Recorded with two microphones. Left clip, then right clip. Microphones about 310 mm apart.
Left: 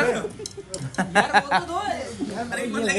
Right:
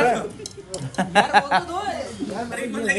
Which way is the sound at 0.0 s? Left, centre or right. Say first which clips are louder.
Right 3 dB; centre.